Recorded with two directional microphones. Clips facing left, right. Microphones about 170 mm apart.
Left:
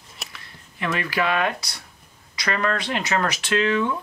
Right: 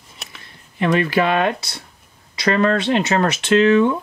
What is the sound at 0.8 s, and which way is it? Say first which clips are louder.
Speech: right 8 dB; 25° right (ahead or behind).